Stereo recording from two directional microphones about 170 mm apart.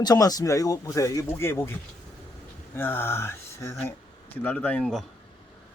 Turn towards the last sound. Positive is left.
turn(degrees=5)  # may be behind; listen again after turning